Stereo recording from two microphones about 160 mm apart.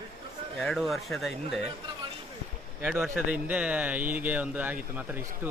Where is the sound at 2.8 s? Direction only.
5° right (ahead or behind).